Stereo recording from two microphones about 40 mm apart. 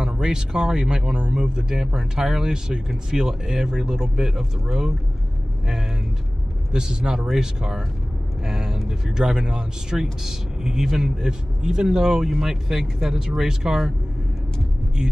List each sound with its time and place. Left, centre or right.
0.0 s speech: centre
6.7 s speech: centre